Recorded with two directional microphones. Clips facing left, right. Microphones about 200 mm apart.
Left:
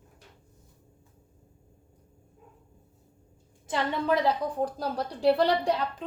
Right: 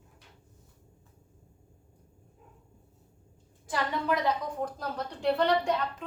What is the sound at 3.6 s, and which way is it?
A woman's voice, 25° left (ahead or behind).